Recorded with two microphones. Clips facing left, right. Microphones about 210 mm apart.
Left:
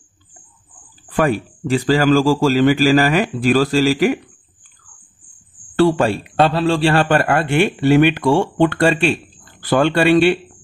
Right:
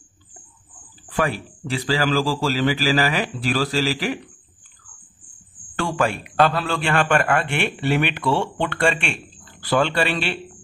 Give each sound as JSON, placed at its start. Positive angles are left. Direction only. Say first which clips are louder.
{"t": 1.1, "sound": "a man's voice", "louder": "left 6 dB", "side_deg": 45}
{"t": 5.8, "sound": "a man's voice", "louder": "left 8 dB", "side_deg": 35}